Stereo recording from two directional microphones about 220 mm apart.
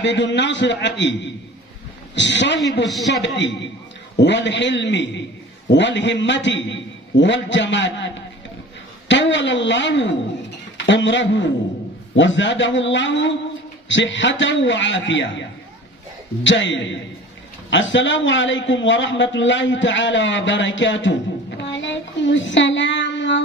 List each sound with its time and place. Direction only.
0.0 s a man's voice: 55° left (ahead or behind)
16.4 s a man's voice: 55° left (ahead or behind)